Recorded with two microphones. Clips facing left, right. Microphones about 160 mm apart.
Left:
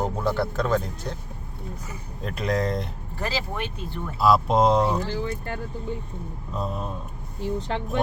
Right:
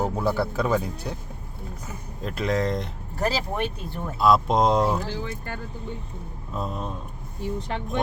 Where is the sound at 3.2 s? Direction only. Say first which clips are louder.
Right 4 dB; 40° right (ahead or behind).